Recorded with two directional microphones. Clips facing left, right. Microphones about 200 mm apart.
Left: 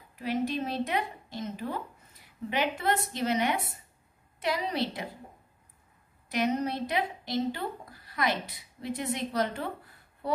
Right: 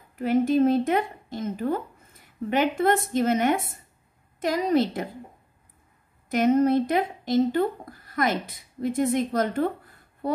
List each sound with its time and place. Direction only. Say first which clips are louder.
0.1 s speech: right 9 dB; 50° right (ahead or behind)
6.3 s speech: right 9 dB; 50° right (ahead or behind)